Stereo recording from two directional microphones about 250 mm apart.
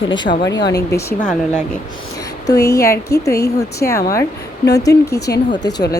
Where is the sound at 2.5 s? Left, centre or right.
Left.